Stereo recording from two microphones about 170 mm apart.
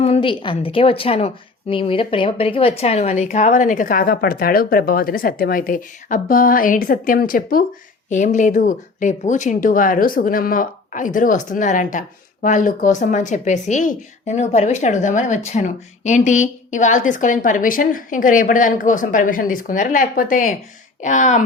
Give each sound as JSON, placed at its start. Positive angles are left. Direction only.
{"t": 0.0, "sound": "a woman's voice", "side_deg": 35}